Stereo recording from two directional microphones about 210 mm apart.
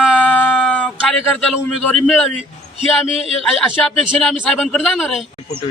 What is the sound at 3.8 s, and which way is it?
A man's voice, 5° left (ahead or behind).